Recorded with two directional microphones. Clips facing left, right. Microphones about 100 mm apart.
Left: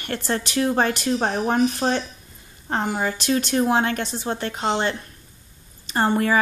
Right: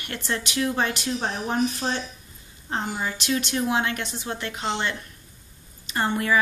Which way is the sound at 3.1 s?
40° left (ahead or behind).